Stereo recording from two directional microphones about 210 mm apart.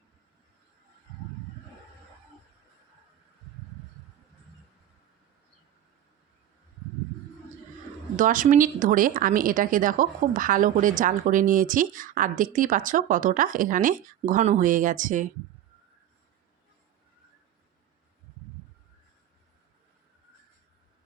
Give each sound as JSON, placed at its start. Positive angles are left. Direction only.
{"t": 8.1, "sound": "a woman's voice", "side_deg": -40}